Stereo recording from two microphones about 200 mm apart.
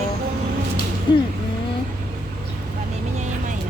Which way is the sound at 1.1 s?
25° left (ahead or behind).